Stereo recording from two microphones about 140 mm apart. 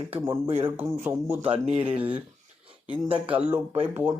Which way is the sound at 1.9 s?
10° right (ahead or behind).